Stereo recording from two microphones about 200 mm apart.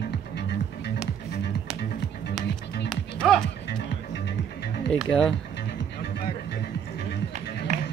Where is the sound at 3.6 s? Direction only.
55° left (ahead or behind).